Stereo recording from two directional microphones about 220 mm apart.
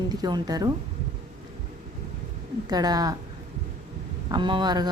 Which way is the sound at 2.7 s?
15° right (ahead or behind).